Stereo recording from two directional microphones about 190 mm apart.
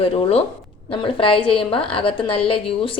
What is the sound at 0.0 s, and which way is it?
A woman's voice, 30° left (ahead or behind).